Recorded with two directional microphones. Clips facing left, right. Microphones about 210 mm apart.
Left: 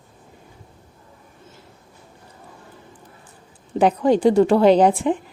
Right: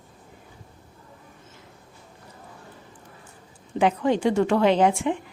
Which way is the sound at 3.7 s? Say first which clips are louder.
Left 5 dB; 40° left (ahead or behind).